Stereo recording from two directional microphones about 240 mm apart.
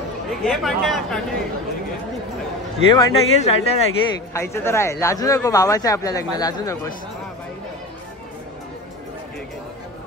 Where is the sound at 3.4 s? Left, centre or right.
Left.